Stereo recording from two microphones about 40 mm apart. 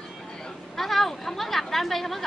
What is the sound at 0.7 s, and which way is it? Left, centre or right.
Speech, centre.